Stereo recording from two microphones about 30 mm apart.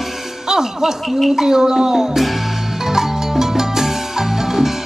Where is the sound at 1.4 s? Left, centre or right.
Centre.